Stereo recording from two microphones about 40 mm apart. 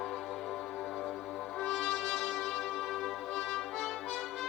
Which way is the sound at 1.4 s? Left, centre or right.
Centre.